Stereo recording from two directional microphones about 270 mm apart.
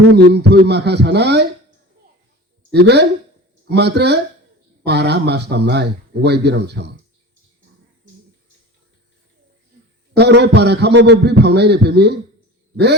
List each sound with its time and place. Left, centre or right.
0.1 s speech: right
2.7 s speech: right
10.2 s speech: right